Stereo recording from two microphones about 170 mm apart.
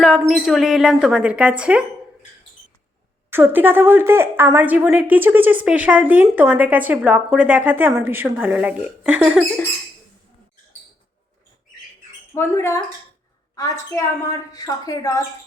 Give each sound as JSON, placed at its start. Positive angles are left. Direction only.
{"t": 0.0, "sound": "speech", "side_deg": 0}
{"t": 3.2, "sound": "a woman's voice", "side_deg": -15}
{"t": 12.3, "sound": "a woman's voice", "side_deg": 15}